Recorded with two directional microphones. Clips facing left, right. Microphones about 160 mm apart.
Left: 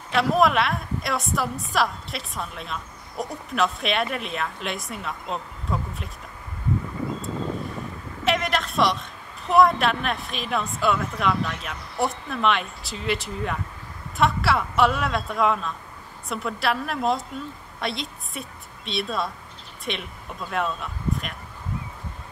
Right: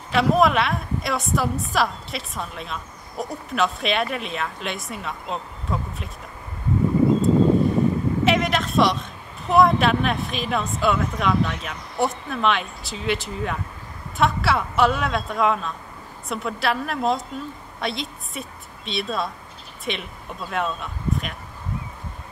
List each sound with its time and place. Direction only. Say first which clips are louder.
0.1 s a woman's voice: right 2 dB; centre (ahead or behind)
7.3 s vehicle: right 12 dB; 35° right (ahead or behind)
8.3 s a woman's voice: left 1 dB; centre (ahead or behind)